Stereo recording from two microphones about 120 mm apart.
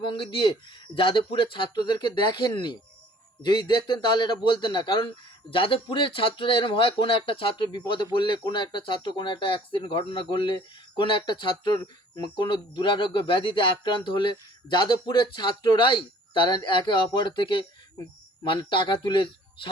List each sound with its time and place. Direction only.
0.0 s speech: 45° left (ahead or behind)